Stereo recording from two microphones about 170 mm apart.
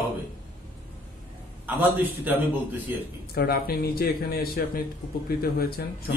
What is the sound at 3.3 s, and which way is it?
A man's voice, 65° left (ahead or behind).